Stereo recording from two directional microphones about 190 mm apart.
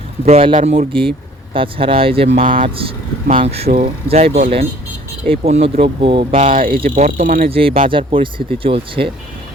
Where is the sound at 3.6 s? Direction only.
50° right (ahead or behind).